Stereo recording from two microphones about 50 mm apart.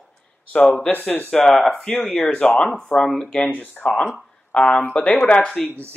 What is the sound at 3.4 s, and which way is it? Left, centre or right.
Speech, left.